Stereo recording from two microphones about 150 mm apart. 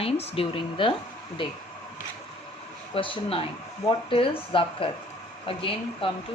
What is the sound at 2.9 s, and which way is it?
A woman's voice, 35° left (ahead or behind).